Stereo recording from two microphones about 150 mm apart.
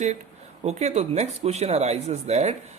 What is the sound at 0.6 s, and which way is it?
Speech, 45° right (ahead or behind).